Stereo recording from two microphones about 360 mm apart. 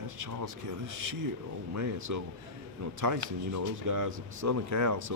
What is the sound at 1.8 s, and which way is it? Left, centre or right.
Speech, right.